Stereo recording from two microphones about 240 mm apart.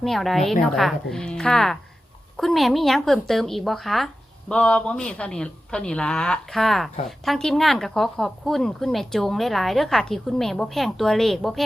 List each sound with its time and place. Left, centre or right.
0.0 s speech: centre